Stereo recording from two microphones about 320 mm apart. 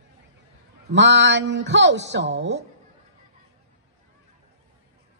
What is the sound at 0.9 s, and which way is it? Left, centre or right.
Speech, right.